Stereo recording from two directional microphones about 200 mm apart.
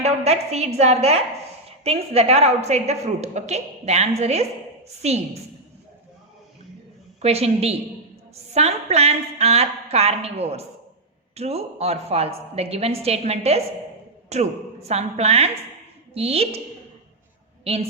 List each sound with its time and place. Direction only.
0.0 s a woman's voice: 30° right (ahead or behind)
7.2 s a woman's voice: 30° right (ahead or behind)
17.6 s a woman's voice: 30° right (ahead or behind)